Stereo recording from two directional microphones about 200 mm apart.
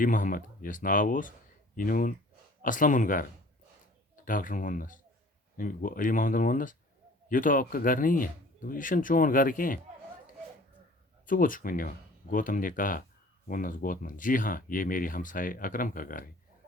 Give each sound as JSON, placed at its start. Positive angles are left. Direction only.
{"t": 0.0, "sound": "speech", "side_deg": 40}
{"t": 4.3, "sound": "speech", "side_deg": 40}
{"t": 11.3, "sound": "speech", "side_deg": 45}